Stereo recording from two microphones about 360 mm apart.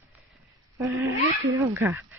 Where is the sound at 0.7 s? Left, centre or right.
Centre.